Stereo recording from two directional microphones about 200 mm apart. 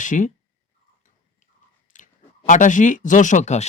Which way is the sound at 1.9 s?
40° left (ahead or behind).